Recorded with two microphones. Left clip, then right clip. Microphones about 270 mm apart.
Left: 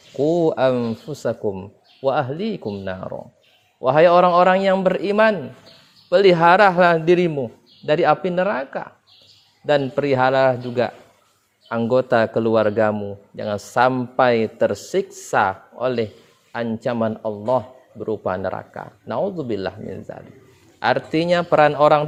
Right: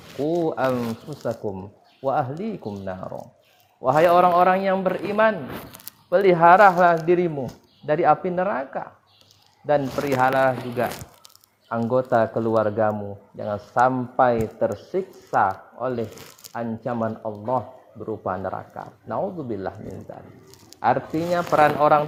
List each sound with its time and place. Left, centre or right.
0.2 s a man's voice: left